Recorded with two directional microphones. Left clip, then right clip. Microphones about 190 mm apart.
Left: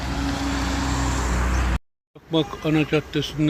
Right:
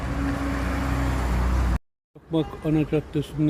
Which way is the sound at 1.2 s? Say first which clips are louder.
Left 4 dB; 50° right (ahead or behind).